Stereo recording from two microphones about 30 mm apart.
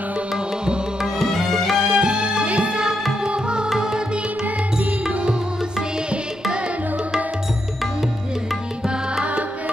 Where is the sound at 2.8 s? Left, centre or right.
Right.